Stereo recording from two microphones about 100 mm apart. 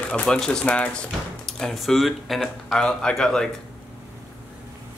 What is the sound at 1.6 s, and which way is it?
Speech, centre (ahead or behind).